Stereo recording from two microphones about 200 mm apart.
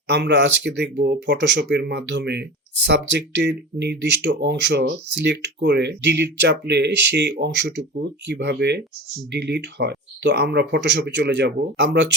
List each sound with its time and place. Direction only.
0.1 s speech: 60° right (ahead or behind)